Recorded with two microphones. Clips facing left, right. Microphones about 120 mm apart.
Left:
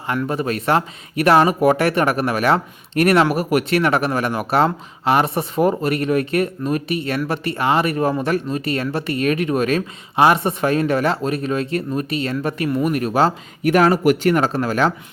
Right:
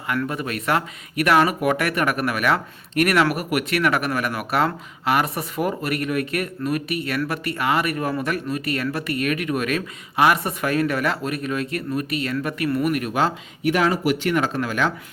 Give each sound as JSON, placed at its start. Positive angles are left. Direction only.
{"t": 0.3, "sound": "speech", "side_deg": 30}
{"t": 13.7, "sound": "speech", "side_deg": 45}